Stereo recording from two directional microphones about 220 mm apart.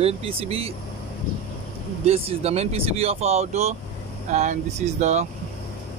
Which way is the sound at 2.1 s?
30° right (ahead or behind).